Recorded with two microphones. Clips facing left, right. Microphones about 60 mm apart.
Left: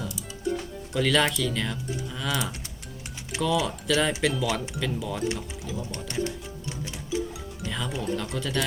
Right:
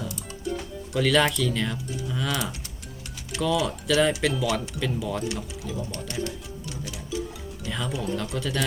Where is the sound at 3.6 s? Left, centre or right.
Centre.